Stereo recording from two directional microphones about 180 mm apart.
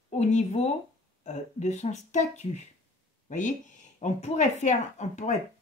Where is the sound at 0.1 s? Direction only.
40° left (ahead or behind).